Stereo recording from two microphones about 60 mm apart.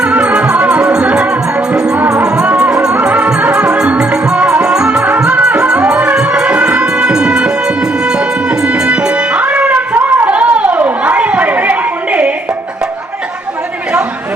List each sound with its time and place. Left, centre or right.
0.0 s music: right